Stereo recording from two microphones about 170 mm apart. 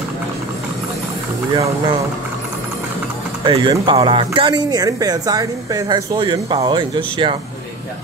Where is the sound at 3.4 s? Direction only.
30° right (ahead or behind).